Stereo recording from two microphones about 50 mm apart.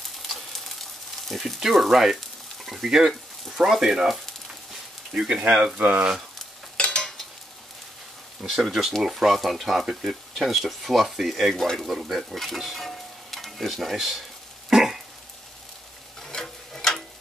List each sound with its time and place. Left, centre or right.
0.3 s sizzle: centre
1.3 s speech: centre
2.1 s frying: centre
3.5 s speech: centre
5.8 s speech: right
6.8 s stir: left
8.4 s speech: centre
12.4 s stir: centre
14.7 s a sound: centre
16.2 s a sound: centre